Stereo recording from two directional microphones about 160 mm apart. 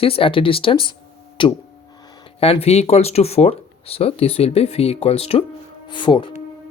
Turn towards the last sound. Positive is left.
turn(degrees=30)  # may be behind; listen again after turning